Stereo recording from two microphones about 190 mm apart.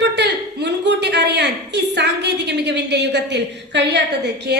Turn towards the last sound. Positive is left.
turn(degrees=-60)  # may be behind; listen again after turning